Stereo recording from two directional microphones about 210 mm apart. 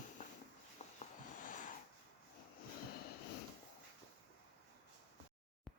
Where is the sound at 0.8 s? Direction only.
35° left (ahead or behind).